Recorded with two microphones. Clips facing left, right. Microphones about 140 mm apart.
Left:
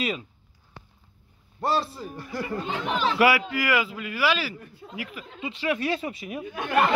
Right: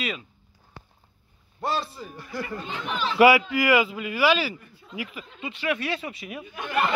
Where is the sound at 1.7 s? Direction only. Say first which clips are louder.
Left 3 dB; 35° left (ahead or behind).